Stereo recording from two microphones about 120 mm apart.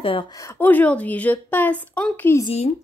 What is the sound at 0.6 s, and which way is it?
Speech, 15° left (ahead or behind).